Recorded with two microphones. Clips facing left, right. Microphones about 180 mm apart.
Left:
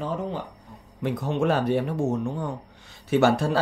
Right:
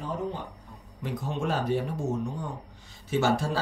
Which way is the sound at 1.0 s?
70° left (ahead or behind).